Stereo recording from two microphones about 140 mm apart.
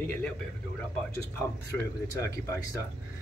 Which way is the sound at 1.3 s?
15° left (ahead or behind).